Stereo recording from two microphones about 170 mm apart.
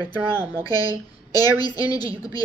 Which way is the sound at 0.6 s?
20° left (ahead or behind).